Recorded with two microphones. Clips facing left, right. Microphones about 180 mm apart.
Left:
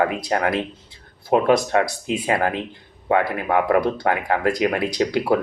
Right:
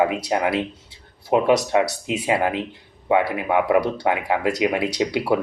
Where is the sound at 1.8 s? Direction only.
75° right (ahead or behind).